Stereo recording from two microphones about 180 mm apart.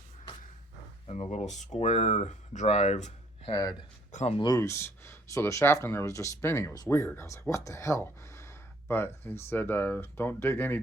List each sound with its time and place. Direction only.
1.0 s speech: 35° left (ahead or behind)
3.5 s speech: 20° left (ahead or behind)
4.1 s speech: 40° left (ahead or behind)
4.4 s speech: 20° left (ahead or behind)